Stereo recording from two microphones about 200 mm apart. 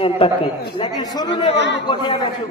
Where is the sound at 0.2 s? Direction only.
30° left (ahead or behind).